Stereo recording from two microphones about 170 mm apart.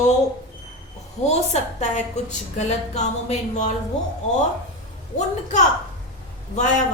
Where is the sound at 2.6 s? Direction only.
40° left (ahead or behind).